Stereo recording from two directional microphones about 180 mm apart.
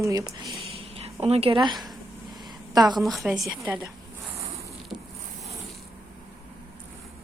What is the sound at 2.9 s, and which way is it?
Speech, centre (ahead or behind).